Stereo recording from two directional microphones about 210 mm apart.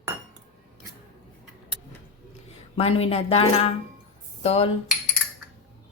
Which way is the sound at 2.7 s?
30° left (ahead or behind).